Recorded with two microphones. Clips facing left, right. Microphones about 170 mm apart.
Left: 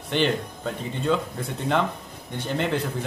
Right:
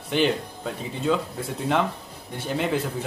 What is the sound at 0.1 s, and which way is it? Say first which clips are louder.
Speech: right 1 dB; 5° right (ahead or behind).